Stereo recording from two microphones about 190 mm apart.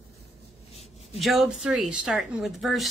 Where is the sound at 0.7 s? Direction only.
35° left (ahead or behind).